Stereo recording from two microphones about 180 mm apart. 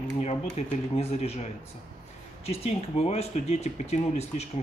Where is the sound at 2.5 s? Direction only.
35° left (ahead or behind).